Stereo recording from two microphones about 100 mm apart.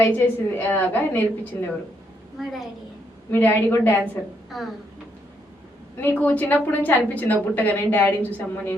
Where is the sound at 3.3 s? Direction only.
20° left (ahead or behind).